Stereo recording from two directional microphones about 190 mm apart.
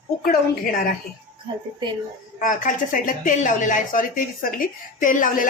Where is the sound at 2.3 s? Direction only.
45° left (ahead or behind).